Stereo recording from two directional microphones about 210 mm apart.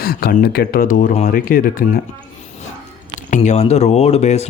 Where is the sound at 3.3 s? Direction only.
35° left (ahead or behind).